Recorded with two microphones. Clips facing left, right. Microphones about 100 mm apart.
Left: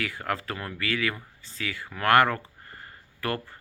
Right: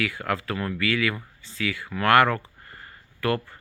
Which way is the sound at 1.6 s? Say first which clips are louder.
Right 5 dB; 20° left (ahead or behind).